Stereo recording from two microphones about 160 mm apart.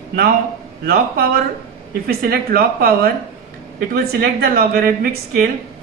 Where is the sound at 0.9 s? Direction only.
65° right (ahead or behind).